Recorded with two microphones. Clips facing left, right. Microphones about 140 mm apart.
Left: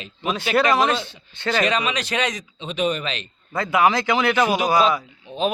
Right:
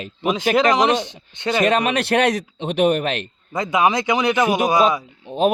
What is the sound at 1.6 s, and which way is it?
Speech, 55° right (ahead or behind).